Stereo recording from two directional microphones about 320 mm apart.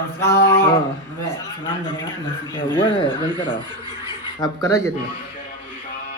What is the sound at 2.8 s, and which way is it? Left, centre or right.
Speech, centre.